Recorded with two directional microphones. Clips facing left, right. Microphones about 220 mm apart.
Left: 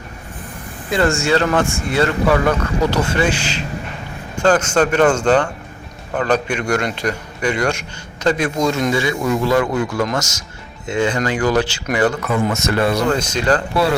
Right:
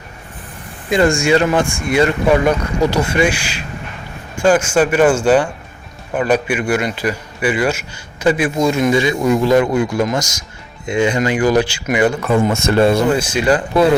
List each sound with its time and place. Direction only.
0.9 s a man's voice: 15° right (ahead or behind)
12.2 s speech: 30° right (ahead or behind)
13.1 s a man's voice: 10° right (ahead or behind)